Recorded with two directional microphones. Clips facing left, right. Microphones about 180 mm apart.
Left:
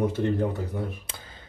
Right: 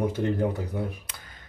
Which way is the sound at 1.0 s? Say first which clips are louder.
Left 3 dB; 25° left (ahead or behind).